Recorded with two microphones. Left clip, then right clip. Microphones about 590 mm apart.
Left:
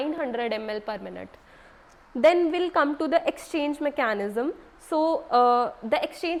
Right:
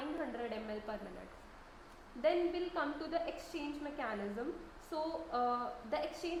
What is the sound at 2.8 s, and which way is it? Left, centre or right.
A woman's voice, left.